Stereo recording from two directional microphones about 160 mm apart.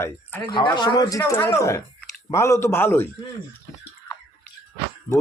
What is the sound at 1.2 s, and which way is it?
Speech, 15° left (ahead or behind).